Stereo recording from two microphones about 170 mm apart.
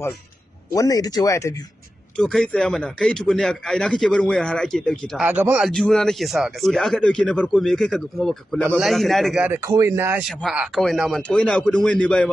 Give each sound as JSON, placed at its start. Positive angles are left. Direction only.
{"t": 0.7, "sound": "speech", "side_deg": 20}
{"t": 2.1, "sound": "speech", "side_deg": 5}
{"t": 5.2, "sound": "speech", "side_deg": -10}
{"t": 5.7, "sound": "speech", "side_deg": 5}
{"t": 9.5, "sound": "speech", "side_deg": -15}